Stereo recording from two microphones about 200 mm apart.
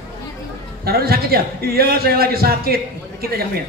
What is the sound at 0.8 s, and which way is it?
A man's voice, 50° right (ahead or behind).